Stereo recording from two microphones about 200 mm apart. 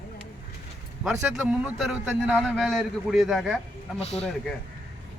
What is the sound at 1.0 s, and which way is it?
A man's voice, 5° right (ahead or behind).